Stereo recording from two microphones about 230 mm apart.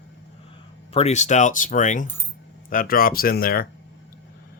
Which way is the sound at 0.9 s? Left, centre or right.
Left.